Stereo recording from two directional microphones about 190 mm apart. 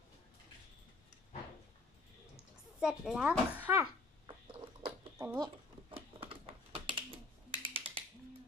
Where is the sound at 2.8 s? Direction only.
5° right (ahead or behind).